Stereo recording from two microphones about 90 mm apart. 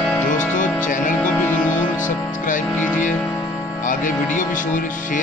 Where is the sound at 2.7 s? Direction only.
20° left (ahead or behind).